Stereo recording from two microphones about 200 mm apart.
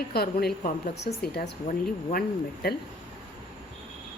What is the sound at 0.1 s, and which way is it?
A woman's voice, 50° left (ahead or behind).